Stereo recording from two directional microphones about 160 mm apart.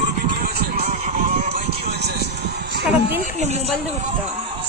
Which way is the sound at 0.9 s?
60° right (ahead or behind).